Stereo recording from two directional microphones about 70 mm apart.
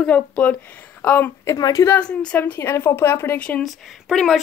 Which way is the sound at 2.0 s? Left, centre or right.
Centre.